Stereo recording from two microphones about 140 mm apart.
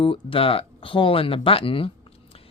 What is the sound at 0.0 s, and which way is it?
Speech, 40° left (ahead or behind).